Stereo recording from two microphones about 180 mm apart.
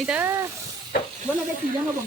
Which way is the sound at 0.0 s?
5° right (ahead or behind).